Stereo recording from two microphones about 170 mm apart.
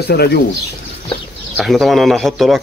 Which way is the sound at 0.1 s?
70° left (ahead or behind).